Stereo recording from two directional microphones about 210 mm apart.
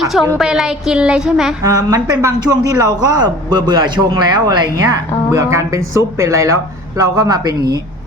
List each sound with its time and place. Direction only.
0.3 s a woman's voice: centre (ahead or behind)
1.6 s a man's voice: 15° right (ahead or behind)